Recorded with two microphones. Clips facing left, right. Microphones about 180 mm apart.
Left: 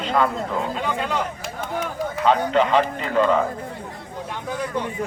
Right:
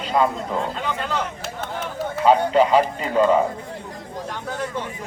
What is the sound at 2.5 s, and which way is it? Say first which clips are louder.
Speech: right 2 dB; 10° right (ahead or behind).